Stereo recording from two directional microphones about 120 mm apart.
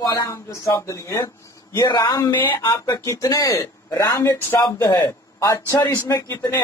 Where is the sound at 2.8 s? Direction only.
30° left (ahead or behind).